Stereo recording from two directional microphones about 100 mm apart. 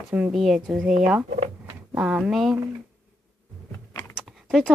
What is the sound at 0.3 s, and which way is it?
A woman's voice, centre (ahead or behind).